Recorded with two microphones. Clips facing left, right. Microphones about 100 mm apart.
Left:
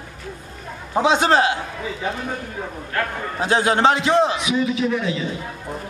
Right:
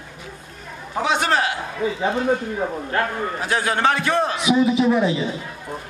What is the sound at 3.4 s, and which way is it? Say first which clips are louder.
Speech: left 5 dB; 25° left (ahead or behind).